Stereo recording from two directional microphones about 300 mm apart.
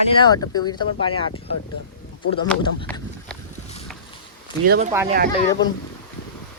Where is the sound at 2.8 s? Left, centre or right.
Centre.